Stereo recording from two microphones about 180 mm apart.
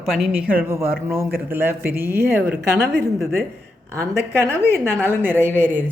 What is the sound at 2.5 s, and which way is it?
Speech, 65° right (ahead or behind).